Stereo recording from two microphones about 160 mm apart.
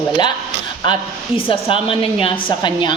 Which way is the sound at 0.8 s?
30° left (ahead or behind).